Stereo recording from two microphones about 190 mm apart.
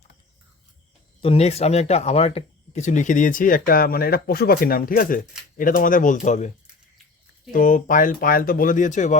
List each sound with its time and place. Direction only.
1.2 s speech: 30° left (ahead or behind)
7.5 s speech: 45° left (ahead or behind)